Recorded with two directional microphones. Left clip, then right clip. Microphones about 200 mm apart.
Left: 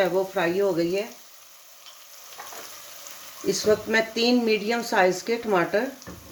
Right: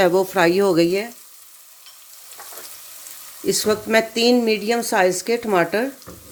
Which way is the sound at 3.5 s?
45° right (ahead or behind).